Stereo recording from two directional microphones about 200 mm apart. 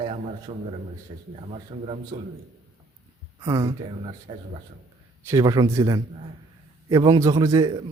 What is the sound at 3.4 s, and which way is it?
Speech, 20° right (ahead or behind).